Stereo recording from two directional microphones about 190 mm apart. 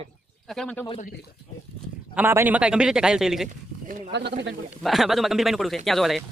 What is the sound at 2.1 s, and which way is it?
A man's voice, 10° right (ahead or behind).